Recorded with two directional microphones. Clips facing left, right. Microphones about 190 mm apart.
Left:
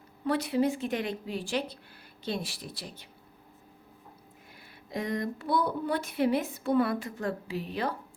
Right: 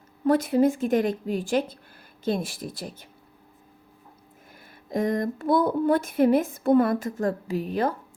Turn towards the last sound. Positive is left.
turn(degrees=-45)  # may be behind; listen again after turning